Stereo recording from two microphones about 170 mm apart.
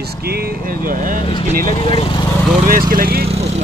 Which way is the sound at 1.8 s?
30° left (ahead or behind).